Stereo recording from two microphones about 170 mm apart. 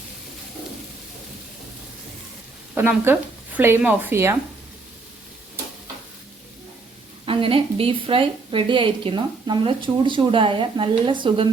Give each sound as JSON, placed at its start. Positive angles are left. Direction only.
{"t": 2.7, "sound": "speech", "side_deg": -15}
{"t": 7.3, "sound": "a woman's voice", "side_deg": -30}